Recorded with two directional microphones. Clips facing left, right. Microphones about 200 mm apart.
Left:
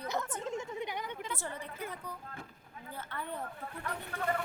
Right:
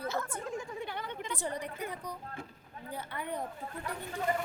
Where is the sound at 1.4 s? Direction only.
15° right (ahead or behind).